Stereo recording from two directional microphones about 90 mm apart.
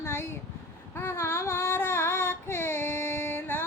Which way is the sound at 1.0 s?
25° left (ahead or behind).